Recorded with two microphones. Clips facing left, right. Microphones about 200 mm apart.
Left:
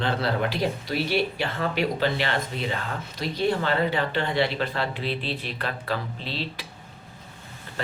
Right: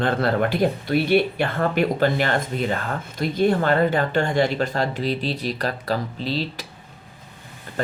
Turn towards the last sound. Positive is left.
turn(degrees=-40)  # may be behind; listen again after turning